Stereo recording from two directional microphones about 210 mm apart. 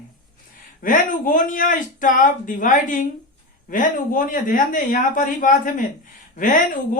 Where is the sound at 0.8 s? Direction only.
40° left (ahead or behind).